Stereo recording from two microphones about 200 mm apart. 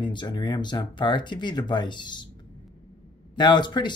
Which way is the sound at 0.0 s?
25° left (ahead or behind).